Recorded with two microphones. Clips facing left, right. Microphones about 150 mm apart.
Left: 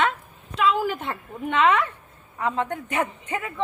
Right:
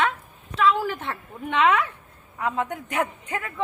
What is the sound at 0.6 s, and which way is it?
Speech, 10° left (ahead or behind).